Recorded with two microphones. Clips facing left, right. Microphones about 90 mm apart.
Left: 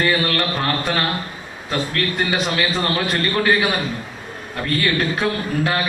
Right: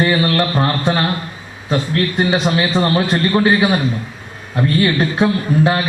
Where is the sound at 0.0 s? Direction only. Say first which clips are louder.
Right 4 dB; 25° right (ahead or behind).